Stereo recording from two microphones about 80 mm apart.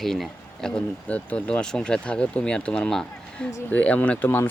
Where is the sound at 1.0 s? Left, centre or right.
Centre.